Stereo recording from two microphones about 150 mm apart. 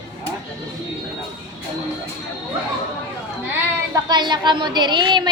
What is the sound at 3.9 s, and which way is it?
A woman's voice, 30° right (ahead or behind).